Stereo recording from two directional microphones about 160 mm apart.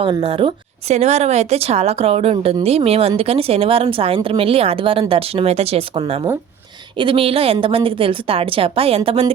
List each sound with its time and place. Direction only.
0.0 s speech: 35° right (ahead or behind)